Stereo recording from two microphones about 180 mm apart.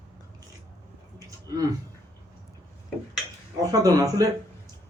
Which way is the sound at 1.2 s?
20° right (ahead or behind).